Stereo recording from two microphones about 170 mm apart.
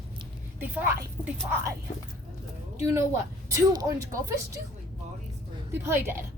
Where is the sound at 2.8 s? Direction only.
15° right (ahead or behind).